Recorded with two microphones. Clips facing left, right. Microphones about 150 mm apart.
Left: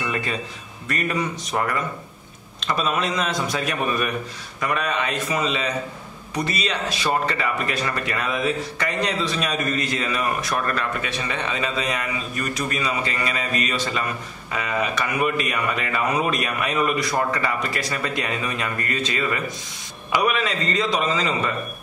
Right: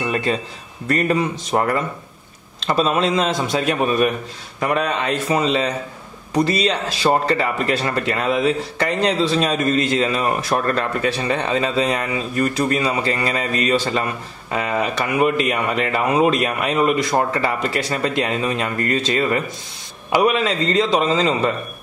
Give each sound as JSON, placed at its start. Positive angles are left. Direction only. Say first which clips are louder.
{"t": 0.8, "sound": "speech", "louder": "right 6 dB", "side_deg": -35}